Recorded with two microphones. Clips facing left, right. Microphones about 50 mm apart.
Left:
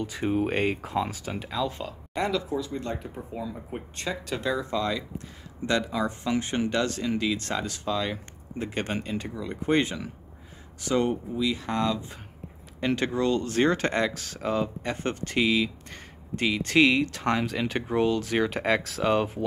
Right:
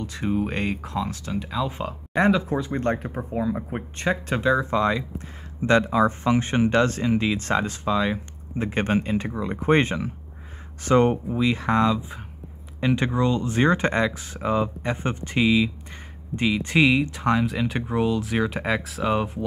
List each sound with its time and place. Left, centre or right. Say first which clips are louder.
0.0 s speech: right 1 dB; centre
1.9 s speech: right 7 dB; right
12.9 s speech: right 2 dB; centre